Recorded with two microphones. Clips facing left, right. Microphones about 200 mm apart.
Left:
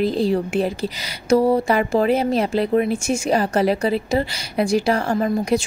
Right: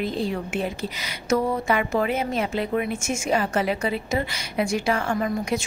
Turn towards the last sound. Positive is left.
turn(degrees=35)  # may be behind; listen again after turning